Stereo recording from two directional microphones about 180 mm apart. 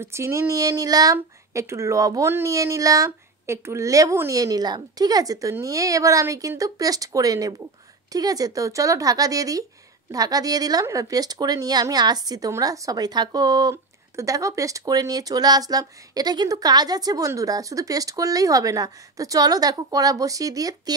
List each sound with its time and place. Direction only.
0.0 s a woman's voice: 15° right (ahead or behind)